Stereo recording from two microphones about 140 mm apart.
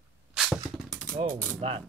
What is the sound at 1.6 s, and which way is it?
Ratchet, 45° right (ahead or behind).